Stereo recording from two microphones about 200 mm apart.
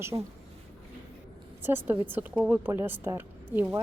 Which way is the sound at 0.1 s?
15° right (ahead or behind).